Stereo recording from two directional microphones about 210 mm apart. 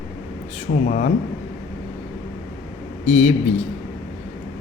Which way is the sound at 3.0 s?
30° left (ahead or behind).